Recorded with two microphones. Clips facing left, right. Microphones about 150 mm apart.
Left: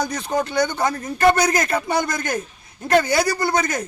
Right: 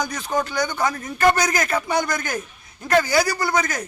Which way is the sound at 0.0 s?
30° left (ahead or behind).